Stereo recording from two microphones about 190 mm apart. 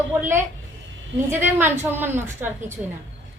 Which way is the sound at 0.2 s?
10° right (ahead or behind).